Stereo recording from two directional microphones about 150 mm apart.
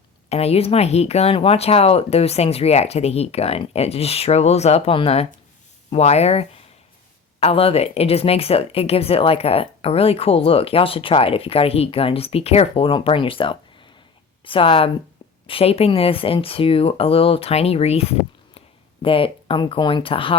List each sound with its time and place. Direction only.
0.3 s speech: 45° left (ahead or behind)
19.0 s speech: 35° left (ahead or behind)